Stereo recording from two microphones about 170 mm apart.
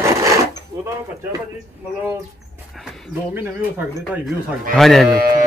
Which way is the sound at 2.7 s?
Centre (ahead or behind).